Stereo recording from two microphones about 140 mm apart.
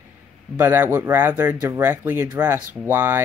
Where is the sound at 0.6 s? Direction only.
15° right (ahead or behind).